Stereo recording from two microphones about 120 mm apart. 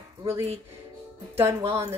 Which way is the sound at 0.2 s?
25° right (ahead or behind).